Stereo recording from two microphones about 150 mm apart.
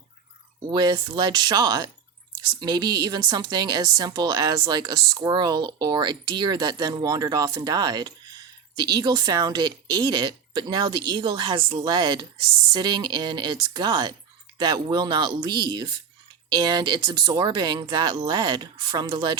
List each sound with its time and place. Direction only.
0.7 s speech: 30° right (ahead or behind)